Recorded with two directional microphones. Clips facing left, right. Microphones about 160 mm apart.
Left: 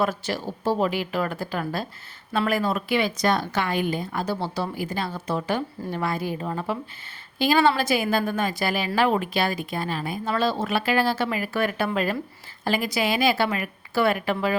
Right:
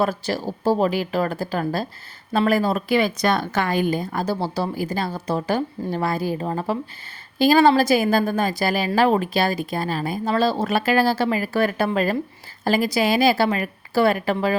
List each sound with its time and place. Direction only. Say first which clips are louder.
0.0 s a woman's voice: right 3 dB; 35° right (ahead or behind)
3.2 s a woman's voice: right 2 dB; 60° right (ahead or behind); by 14.5 s 35° right (ahead or behind)